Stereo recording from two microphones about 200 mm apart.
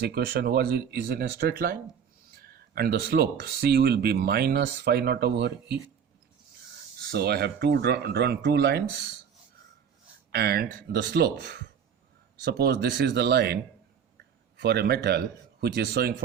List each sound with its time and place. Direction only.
0.0 s speech: 55° right (ahead or behind)
7.1 s speech: 55° right (ahead or behind)
10.3 s speech: 55° right (ahead or behind)